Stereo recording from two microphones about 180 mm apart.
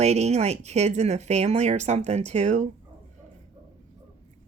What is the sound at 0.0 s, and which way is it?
Speech, 35° right (ahead or behind).